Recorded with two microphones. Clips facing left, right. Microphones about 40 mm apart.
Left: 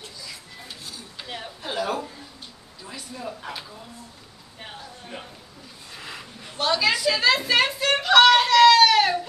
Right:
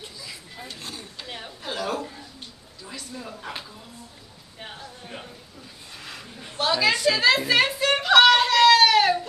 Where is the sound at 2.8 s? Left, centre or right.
Centre.